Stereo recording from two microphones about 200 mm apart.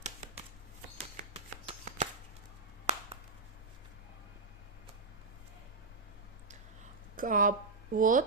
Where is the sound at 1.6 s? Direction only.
35° right (ahead or behind).